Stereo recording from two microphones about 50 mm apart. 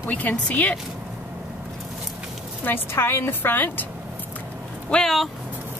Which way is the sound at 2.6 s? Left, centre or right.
Left.